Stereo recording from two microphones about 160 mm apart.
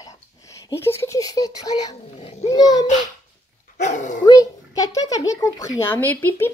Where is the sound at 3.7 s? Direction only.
50° left (ahead or behind).